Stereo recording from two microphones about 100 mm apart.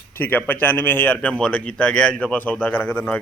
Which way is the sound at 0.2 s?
20° left (ahead or behind).